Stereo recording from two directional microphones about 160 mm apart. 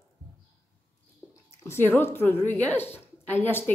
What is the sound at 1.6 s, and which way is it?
A woman's voice, 15° left (ahead or behind).